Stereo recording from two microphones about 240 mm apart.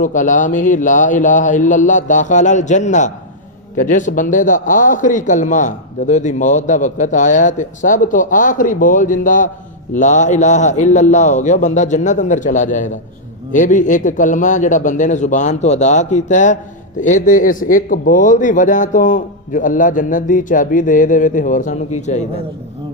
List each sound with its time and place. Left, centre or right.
0.0 s a man's voice: left